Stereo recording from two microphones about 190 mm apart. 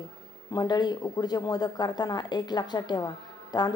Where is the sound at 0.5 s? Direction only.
20° left (ahead or behind).